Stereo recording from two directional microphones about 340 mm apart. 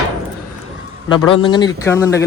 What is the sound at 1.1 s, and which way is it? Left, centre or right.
Speech, centre.